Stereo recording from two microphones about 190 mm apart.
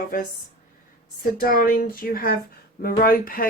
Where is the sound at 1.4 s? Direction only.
50° left (ahead or behind).